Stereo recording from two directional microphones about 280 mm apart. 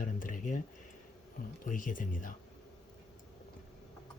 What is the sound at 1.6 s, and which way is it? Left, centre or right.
Speech, left.